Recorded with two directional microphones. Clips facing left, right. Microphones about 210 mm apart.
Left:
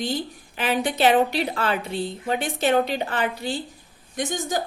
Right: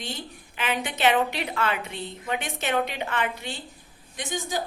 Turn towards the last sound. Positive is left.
turn(degrees=45)  # may be behind; listen again after turning